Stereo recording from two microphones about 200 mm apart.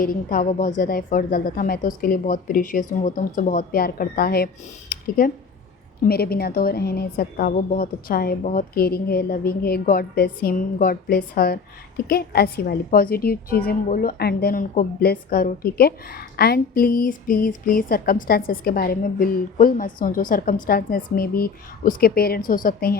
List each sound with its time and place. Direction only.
0.0 s a woman's voice: 45° left (ahead or behind)
4.9 s a sound: 45° left (ahead or behind)
6.1 s a woman's voice: 50° left (ahead or behind)